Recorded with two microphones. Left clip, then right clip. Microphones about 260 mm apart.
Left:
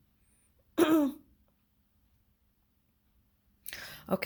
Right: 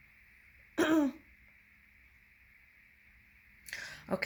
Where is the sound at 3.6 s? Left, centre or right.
Left.